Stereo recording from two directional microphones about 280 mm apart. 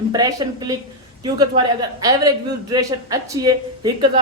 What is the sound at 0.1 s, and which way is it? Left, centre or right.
Speech, centre.